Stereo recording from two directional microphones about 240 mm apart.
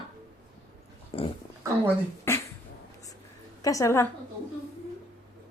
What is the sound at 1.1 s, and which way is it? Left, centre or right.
Speech, left.